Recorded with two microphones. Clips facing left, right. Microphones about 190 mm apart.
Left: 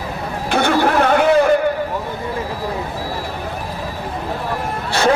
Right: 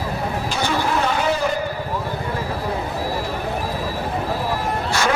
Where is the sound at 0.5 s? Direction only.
60° left (ahead or behind).